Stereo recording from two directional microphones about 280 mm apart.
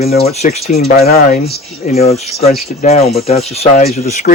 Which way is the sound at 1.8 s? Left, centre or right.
Left.